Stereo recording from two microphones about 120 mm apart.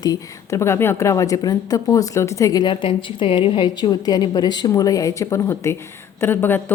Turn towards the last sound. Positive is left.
turn(degrees=15)  # may be behind; listen again after turning